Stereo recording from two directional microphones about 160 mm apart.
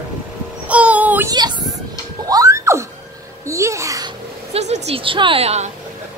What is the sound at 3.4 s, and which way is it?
Speech, 20° right (ahead or behind).